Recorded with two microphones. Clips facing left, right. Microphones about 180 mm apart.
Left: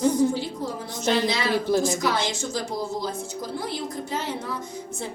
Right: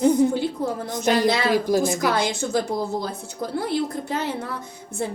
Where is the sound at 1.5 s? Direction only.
10° right (ahead or behind).